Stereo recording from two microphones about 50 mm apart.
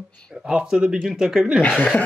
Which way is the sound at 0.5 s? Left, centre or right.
Centre.